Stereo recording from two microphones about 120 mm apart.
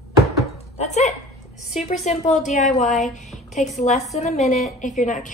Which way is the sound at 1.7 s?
75° left (ahead or behind).